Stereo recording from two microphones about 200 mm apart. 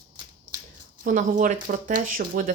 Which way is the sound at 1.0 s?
40° right (ahead or behind).